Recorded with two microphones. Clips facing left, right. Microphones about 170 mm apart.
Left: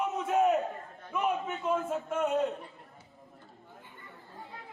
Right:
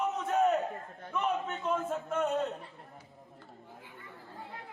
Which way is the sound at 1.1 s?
10° left (ahead or behind).